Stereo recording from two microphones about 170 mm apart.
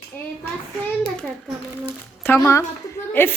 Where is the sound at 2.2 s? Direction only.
15° left (ahead or behind).